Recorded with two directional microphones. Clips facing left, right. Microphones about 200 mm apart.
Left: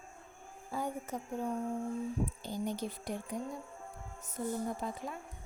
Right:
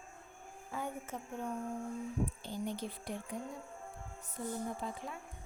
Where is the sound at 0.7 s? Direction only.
40° left (ahead or behind).